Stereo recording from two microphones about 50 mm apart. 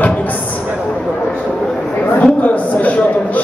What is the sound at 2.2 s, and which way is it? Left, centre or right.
A man's voice, left.